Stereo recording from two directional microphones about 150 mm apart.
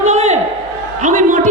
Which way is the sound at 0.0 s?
50° right (ahead or behind).